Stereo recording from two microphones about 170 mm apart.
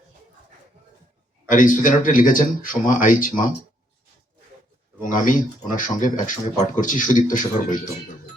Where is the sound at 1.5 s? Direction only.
50° left (ahead or behind).